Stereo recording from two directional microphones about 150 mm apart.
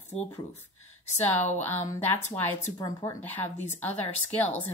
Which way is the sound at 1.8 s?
15° left (ahead or behind).